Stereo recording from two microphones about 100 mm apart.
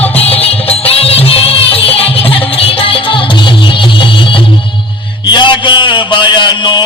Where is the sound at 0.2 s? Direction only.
85° left; by 4.4 s 60° left (ahead or behind).